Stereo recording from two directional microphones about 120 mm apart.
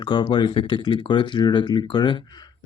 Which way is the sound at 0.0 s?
40° left (ahead or behind).